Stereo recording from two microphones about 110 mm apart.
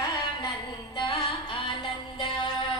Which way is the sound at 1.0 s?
50° left (ahead or behind).